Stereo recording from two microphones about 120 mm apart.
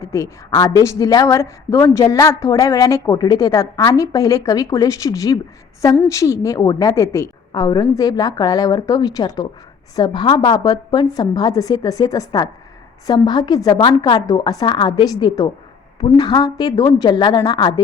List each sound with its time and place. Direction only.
0.0 s a woman's voice: 25° left (ahead or behind)